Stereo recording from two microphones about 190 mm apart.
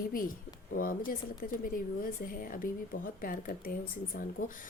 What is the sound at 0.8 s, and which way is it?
Speech, 50° left (ahead or behind).